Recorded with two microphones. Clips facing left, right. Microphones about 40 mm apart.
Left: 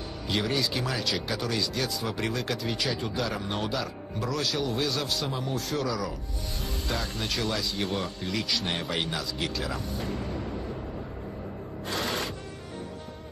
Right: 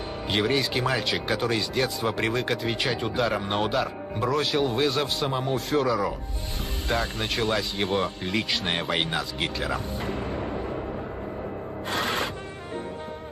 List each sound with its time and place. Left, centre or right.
0.3 s speech: right
11.9 s music: right